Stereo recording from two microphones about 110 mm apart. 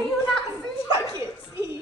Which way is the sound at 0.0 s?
5° left (ahead or behind).